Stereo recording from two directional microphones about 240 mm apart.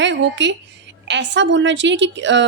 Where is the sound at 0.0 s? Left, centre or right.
Right.